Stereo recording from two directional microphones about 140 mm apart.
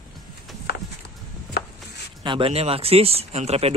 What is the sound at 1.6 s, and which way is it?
Chopping, 90° left.